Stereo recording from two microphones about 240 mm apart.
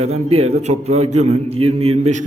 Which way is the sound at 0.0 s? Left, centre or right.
Right.